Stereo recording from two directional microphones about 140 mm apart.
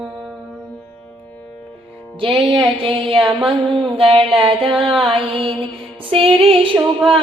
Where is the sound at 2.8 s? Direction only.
40° right (ahead or behind).